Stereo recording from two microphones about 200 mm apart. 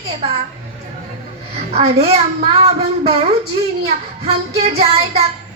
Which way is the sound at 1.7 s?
30° right (ahead or behind).